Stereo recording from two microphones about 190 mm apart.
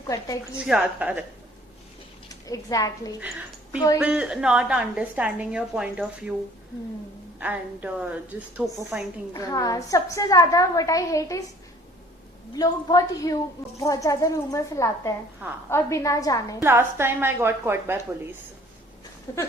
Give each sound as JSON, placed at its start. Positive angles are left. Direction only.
{"t": 0.5, "sound": "a woman's voice", "side_deg": -5}
{"t": 2.3, "sound": "a woman's voice", "side_deg": 20}
{"t": 3.2, "sound": "a woman's voice", "side_deg": -5}
{"t": 7.3, "sound": "a woman's voice", "side_deg": -5}
{"t": 9.3, "sound": "a woman's voice", "side_deg": 20}
{"t": 12.5, "sound": "a woman's voice", "side_deg": 20}
{"t": 16.6, "sound": "a woman's voice", "side_deg": -10}
{"t": 19.3, "sound": "a woman's voice", "side_deg": 15}